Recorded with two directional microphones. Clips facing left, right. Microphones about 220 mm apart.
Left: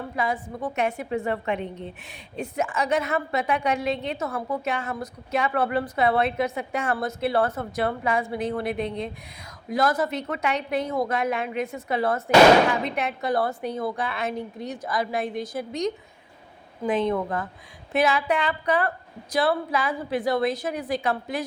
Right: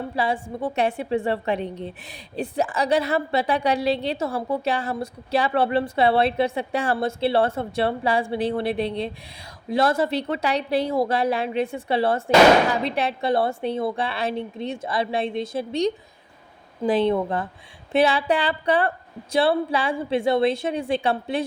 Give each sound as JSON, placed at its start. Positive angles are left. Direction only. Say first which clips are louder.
{"t": 0.2, "sound": "a woman's voice", "louder": "right 3 dB", "side_deg": -30}